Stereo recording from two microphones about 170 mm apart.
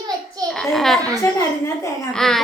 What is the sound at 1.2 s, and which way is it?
Speech, 20° left (ahead or behind).